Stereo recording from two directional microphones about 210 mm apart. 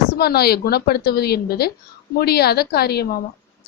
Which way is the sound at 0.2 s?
50° left (ahead or behind).